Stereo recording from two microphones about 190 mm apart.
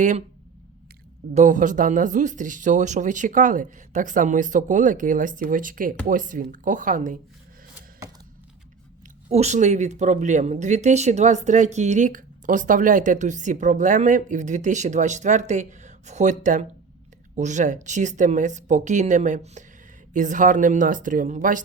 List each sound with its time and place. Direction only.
1.3 s speech: 40° right (ahead or behind)
9.3 s speech: 35° right (ahead or behind)